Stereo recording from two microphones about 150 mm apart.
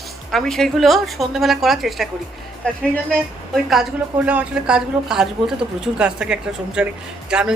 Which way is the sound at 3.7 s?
5° right (ahead or behind).